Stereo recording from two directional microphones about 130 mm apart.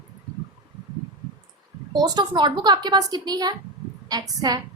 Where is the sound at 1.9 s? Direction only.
30° right (ahead or behind).